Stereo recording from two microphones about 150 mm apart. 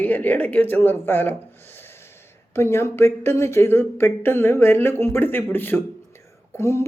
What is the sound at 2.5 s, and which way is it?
Speech, 15° left (ahead or behind).